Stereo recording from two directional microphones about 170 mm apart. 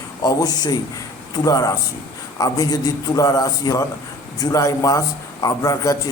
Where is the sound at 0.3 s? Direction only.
20° left (ahead or behind).